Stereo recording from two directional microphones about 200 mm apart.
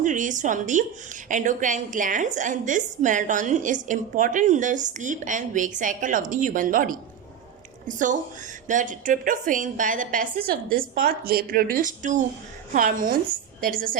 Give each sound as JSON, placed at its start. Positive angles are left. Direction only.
{"t": 0.0, "sound": "a woman's voice", "side_deg": -40}